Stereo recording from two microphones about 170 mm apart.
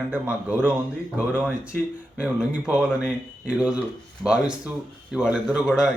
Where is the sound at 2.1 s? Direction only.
5° right (ahead or behind).